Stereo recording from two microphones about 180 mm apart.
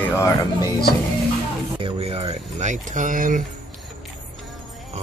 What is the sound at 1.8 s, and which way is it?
Speech, 30° right (ahead or behind).